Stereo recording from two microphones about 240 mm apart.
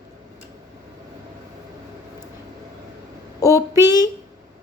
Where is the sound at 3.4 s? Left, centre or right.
Centre.